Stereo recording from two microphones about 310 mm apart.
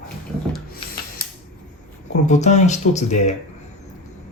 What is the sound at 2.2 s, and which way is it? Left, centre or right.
Speech, left.